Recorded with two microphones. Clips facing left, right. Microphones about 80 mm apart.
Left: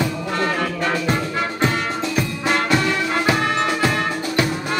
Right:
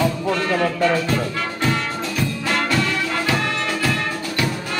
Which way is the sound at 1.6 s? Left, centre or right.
Left.